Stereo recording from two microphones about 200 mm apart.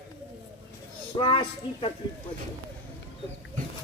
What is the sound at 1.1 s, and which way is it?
Speech, 25° left (ahead or behind).